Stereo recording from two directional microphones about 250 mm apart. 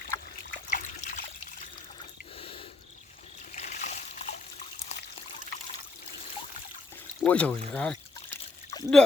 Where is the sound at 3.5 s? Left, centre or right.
Left.